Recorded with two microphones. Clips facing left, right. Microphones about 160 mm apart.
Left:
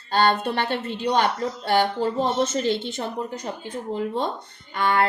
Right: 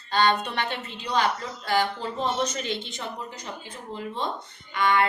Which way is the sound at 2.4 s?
40° left (ahead or behind).